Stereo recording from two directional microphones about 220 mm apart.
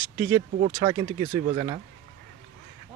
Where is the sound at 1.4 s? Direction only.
25° right (ahead or behind).